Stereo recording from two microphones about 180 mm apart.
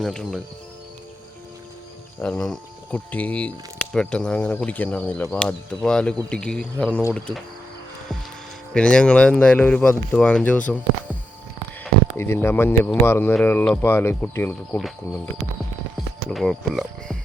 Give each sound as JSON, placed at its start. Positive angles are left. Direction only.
{"t": 0.0, "sound": "speech", "side_deg": 5}
{"t": 2.2, "sound": "speech", "side_deg": 0}
{"t": 8.7, "sound": "speech", "side_deg": 5}
{"t": 12.1, "sound": "speech", "side_deg": 15}
{"t": 16.3, "sound": "speech", "side_deg": 0}